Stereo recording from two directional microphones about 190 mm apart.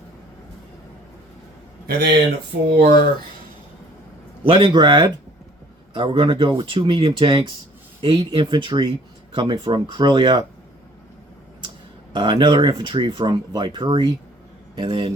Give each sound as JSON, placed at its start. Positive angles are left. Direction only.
{"t": 1.9, "sound": "speech", "side_deg": -60}
{"t": 4.4, "sound": "speech", "side_deg": -25}
{"t": 12.1, "sound": "speech", "side_deg": -25}